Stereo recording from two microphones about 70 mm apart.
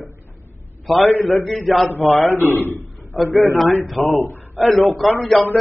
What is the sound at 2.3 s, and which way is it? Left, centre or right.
Speech, left.